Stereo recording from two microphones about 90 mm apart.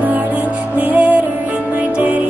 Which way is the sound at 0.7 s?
15° right (ahead or behind).